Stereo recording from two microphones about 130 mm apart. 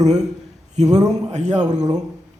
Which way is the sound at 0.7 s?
60° right (ahead or behind).